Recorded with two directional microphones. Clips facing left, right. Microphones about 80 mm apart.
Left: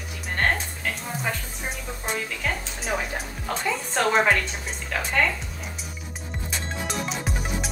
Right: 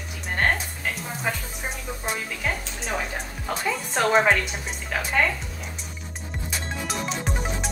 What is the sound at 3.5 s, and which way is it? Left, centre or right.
Speech, centre.